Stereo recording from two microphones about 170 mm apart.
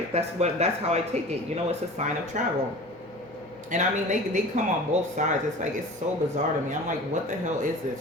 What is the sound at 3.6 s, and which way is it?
Speech, 45° right (ahead or behind).